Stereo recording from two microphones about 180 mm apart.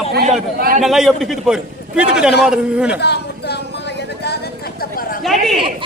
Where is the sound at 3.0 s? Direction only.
65° left (ahead or behind).